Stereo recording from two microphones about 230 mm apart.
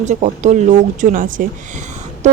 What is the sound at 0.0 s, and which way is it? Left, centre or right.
Speech, right.